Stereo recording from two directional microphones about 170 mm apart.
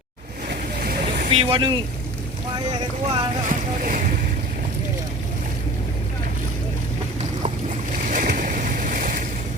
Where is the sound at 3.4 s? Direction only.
50° right (ahead or behind).